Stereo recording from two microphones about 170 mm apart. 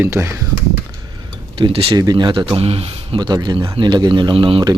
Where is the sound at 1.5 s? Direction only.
30° right (ahead or behind).